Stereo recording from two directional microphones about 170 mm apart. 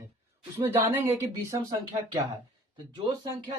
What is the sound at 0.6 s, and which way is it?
Speech, 15° right (ahead or behind).